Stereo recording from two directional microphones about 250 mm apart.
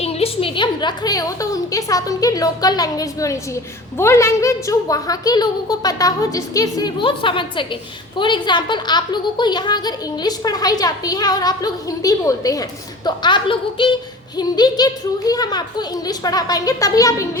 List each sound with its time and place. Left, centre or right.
0.0 s a woman's voice: left